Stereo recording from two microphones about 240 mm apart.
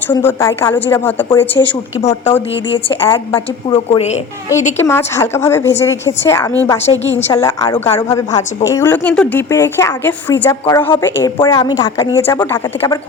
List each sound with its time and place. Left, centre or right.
0.1 s a woman's voice: centre
2.6 s a woman's voice: left
3.0 s a woman's voice: centre
3.7 s a woman's voice: left
4.8 s a woman's voice: centre